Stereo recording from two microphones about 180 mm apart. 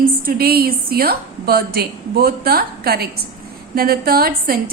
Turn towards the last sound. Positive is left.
turn(degrees=-55)  # may be behind; listen again after turning